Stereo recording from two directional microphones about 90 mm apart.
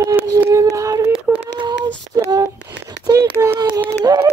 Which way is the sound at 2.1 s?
40° right (ahead or behind).